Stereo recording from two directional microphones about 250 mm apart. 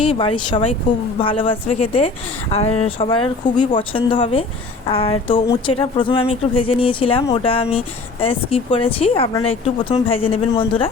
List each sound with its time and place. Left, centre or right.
0.0 s a woman's voice: left